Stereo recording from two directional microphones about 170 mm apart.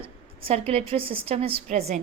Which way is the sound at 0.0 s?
35° right (ahead or behind).